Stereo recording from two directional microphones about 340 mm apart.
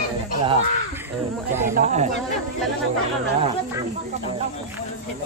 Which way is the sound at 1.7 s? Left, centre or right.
Centre.